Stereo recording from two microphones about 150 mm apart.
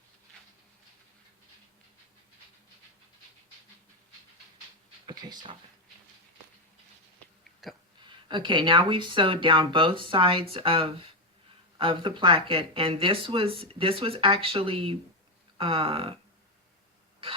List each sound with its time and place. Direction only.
5.0 s speech: 30° right (ahead or behind)
7.6 s hiccup: centre (ahead or behind)
8.3 s speech: 35° right (ahead or behind)